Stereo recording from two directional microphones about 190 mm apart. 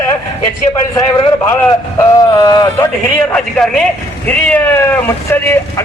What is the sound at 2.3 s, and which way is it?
Speech, 20° left (ahead or behind).